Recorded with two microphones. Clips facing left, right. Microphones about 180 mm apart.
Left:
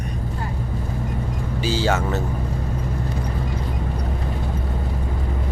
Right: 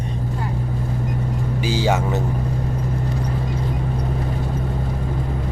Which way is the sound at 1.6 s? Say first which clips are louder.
Right 1 dB; 15° right (ahead or behind).